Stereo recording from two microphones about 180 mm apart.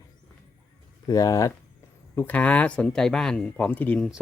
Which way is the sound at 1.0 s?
20° left (ahead or behind).